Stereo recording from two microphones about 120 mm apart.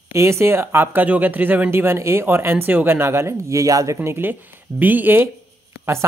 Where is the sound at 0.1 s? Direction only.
25° right (ahead or behind).